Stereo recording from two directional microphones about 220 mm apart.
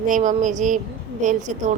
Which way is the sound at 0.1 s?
35° right (ahead or behind).